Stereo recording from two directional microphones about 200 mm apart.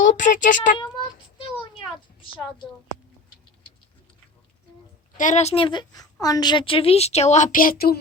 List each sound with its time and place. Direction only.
0.0 s speech: 40° left (ahead or behind)
5.1 s a woman's voice: 40° left (ahead or behind)